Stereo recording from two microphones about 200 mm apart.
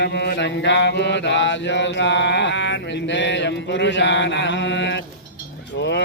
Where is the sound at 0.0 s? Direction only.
60° left (ahead or behind).